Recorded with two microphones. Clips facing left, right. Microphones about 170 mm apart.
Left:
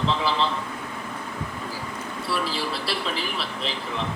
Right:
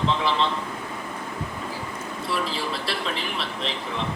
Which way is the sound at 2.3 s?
Centre (ahead or behind).